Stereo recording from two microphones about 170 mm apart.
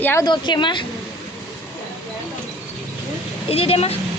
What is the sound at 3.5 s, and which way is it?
Speech, 35° left (ahead or behind).